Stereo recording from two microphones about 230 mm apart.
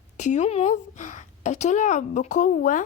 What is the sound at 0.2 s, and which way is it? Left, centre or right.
A woman's voice, left.